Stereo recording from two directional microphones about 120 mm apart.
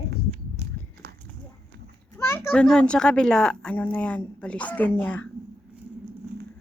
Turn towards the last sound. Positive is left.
turn(degrees=15)  # may be behind; listen again after turning